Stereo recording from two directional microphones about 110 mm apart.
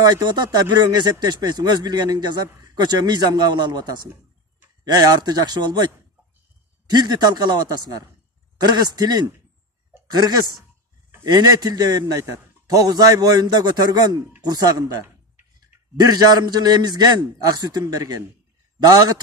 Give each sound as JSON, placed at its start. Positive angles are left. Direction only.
{"t": 0.0, "sound": "speech", "side_deg": -40}
{"t": 6.9, "sound": "speech", "side_deg": -40}
{"t": 11.2, "sound": "speech", "side_deg": -40}
{"t": 16.0, "sound": "speech", "side_deg": -35}